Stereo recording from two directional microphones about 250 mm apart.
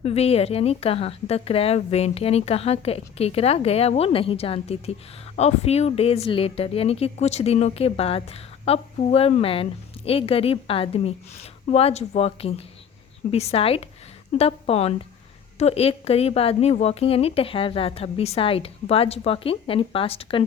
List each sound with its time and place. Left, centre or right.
0.0 s speech: left